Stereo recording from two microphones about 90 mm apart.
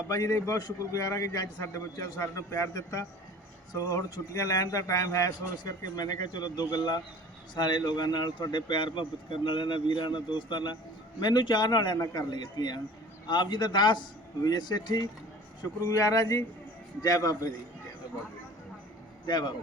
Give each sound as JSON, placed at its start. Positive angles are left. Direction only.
{"t": 0.1, "sound": "a man's voice", "side_deg": 40}
{"t": 15.8, "sound": "a man's voice", "side_deg": 40}
{"t": 19.2, "sound": "a man's voice", "side_deg": 55}